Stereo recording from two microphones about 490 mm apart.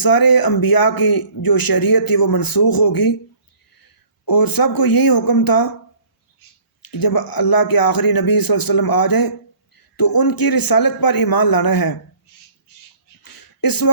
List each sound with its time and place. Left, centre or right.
0.0 s a man's voice: left
4.3 s a man's voice: left
6.8 s a man's voice: left
13.2 s a sound: left